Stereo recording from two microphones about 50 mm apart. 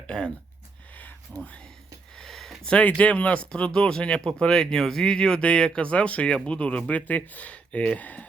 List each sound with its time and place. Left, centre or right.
0.1 s speech: left
1.3 s speech: centre
2.1 s a sound: centre
2.8 s speech: left